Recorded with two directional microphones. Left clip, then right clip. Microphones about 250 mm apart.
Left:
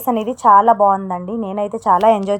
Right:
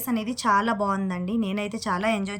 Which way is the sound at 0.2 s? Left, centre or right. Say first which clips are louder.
Left 12 dB; right.